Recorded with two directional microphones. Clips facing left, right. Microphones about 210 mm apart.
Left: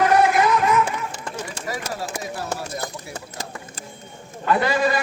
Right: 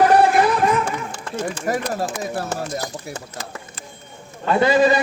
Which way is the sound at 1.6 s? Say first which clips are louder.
Right 7 dB; 50° right (ahead or behind).